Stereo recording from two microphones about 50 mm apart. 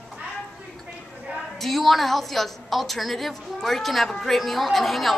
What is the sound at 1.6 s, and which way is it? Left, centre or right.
A woman's voice, centre.